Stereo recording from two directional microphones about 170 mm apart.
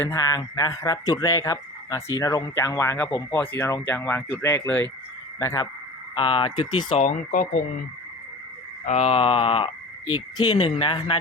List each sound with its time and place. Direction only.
0.1 s speech: 20° left (ahead or behind)
6.1 s speech: 30° left (ahead or behind)
7.0 s speech: 55° left (ahead or behind)
8.9 s a sound: 35° left (ahead or behind)
10.3 s speech: 25° left (ahead or behind)